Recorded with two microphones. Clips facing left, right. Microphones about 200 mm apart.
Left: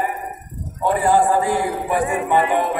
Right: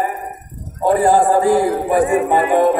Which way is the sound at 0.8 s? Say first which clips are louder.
Right 4 dB; 40° right (ahead or behind).